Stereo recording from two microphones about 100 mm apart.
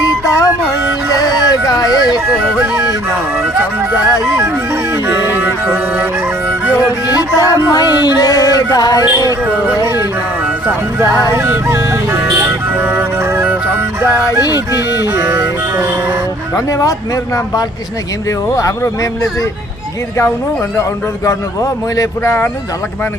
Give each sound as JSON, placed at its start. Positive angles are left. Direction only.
{"t": 0.0, "sound": "music", "side_deg": 35}
{"t": 1.5, "sound": "a sound", "side_deg": 40}
{"t": 2.3, "sound": "music", "side_deg": -10}
{"t": 5.0, "sound": "music", "side_deg": -20}
{"t": 7.1, "sound": "music", "side_deg": 40}
{"t": 9.8, "sound": "speech", "side_deg": -25}
{"t": 11.3, "sound": "music", "side_deg": -25}
{"t": 14.7, "sound": "music", "side_deg": -30}
{"t": 16.6, "sound": "music", "side_deg": 30}
{"t": 21.2, "sound": "a man's voice", "side_deg": 35}